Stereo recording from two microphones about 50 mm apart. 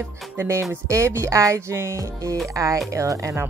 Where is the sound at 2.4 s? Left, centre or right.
Right.